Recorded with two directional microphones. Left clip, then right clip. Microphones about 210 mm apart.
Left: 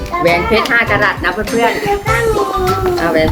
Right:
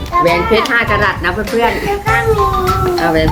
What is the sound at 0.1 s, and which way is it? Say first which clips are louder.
Music: right 2 dB; 25° right (ahead or behind).